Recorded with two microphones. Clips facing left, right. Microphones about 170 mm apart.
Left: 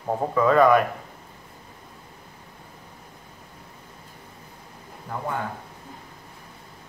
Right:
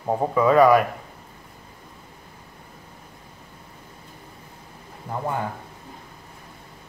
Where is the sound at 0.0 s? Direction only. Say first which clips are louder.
Right 2 dB; 10° right (ahead or behind).